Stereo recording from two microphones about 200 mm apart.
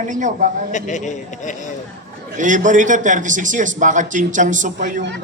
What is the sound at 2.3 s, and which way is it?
A man's voice, 40° right (ahead or behind).